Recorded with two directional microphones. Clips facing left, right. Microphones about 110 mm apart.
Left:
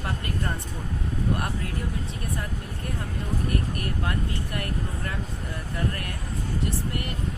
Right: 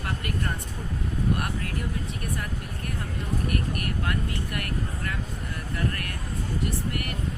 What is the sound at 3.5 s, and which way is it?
Speech, 25° left (ahead or behind).